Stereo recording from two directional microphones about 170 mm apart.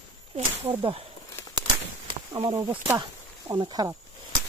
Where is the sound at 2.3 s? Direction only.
25° right (ahead or behind).